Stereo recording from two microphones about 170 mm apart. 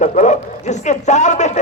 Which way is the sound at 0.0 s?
45° left (ahead or behind).